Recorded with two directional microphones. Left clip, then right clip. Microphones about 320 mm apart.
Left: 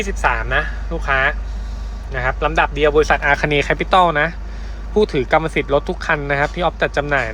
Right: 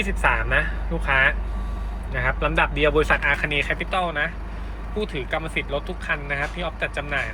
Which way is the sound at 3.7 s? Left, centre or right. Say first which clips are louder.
Left 10 dB; left.